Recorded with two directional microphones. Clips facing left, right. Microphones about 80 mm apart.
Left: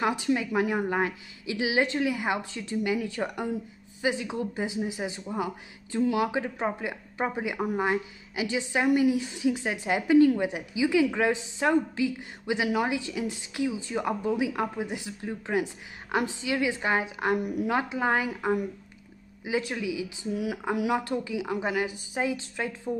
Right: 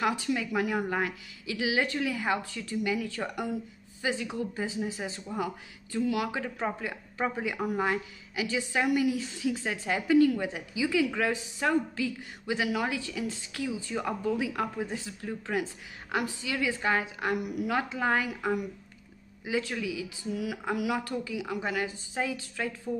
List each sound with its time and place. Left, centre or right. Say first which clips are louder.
0.0 s speech: left 3 dB; left